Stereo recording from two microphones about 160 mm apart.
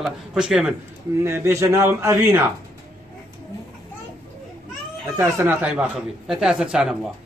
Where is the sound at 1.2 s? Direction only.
15° right (ahead or behind).